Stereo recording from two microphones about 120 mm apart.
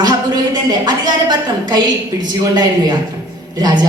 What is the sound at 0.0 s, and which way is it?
A woman's voice, 35° right (ahead or behind).